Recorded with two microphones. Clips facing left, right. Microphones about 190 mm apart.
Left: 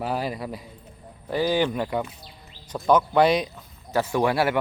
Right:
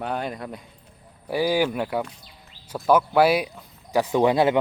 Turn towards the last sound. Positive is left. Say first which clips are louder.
# right 3 dB
turn(degrees=-20)  # may be behind; listen again after turning